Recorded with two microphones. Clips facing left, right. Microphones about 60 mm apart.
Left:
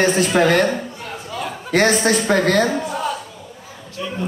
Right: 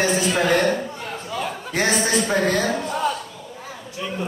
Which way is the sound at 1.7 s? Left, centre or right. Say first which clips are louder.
Left 5 dB; left.